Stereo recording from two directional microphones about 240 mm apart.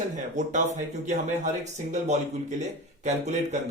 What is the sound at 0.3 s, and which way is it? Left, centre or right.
Speech, right.